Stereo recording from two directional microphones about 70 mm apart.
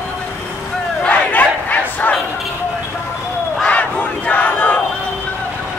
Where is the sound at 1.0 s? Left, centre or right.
Left.